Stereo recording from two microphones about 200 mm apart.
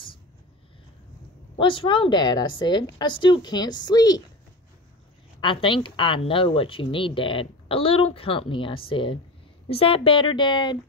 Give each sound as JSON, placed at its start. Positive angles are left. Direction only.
{"t": 1.6, "sound": "speech", "side_deg": 25}
{"t": 5.4, "sound": "speech", "side_deg": 25}